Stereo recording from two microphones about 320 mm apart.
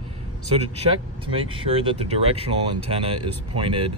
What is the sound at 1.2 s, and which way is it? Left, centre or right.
Speech, centre.